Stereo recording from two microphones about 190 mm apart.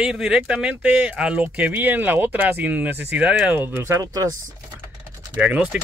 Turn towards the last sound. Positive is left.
turn(degrees=-5)  # may be behind; listen again after turning